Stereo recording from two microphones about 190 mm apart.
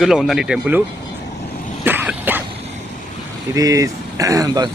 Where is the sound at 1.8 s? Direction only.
10° right (ahead or behind).